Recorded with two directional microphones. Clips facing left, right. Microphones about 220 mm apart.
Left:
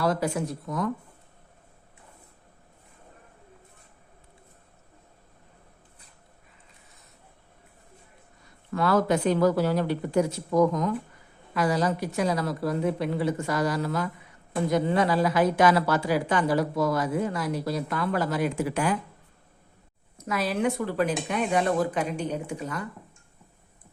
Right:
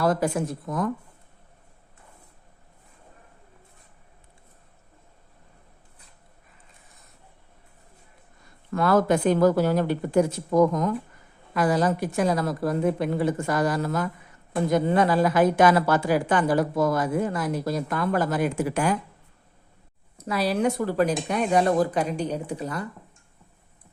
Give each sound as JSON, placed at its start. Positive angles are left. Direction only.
{"t": 0.0, "sound": "a woman's voice", "side_deg": -50}
{"t": 8.7, "sound": "a woman's voice", "side_deg": -50}
{"t": 20.1, "sound": "speech", "side_deg": -35}